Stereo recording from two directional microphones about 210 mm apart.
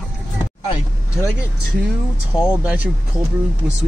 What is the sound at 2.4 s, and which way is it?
Speech, 5° right (ahead or behind).